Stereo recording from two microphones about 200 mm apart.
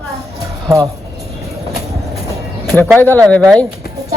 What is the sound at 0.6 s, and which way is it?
Speech, 15° right (ahead or behind).